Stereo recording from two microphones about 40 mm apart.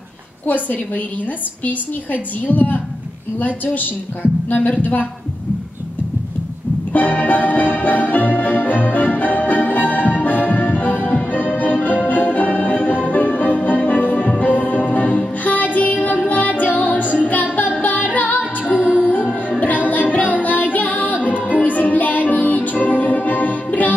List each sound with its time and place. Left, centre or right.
0.5 s a woman's voice: left
6.9 s organ: left
17.8 s music: left